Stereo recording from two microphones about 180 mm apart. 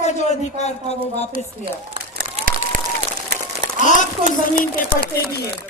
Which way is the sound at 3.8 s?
45° left (ahead or behind).